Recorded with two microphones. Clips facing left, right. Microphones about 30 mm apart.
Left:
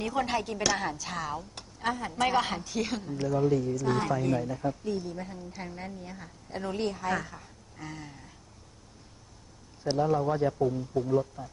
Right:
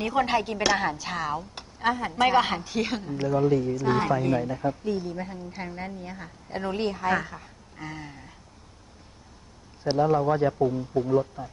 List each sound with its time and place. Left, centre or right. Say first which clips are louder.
0.0 s a woman's voice: right 5 dB; right
9.8 s a woman's voice: right 4 dB; right